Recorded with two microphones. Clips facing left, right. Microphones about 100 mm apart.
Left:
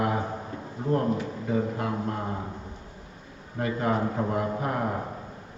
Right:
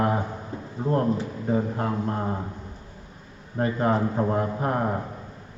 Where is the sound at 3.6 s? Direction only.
35° right (ahead or behind).